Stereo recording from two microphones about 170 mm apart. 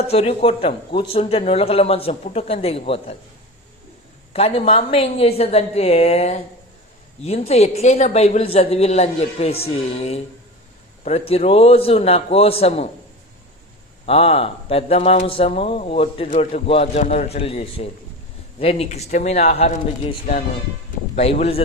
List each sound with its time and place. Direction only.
0.1 s a man's voice: 35° left (ahead or behind)
4.3 s a man's voice: 35° left (ahead or behind)
14.1 s a man's voice: 35° left (ahead or behind)
16.3 s a man's voice: 45° left (ahead or behind)
21.2 s a man's voice: 40° left (ahead or behind)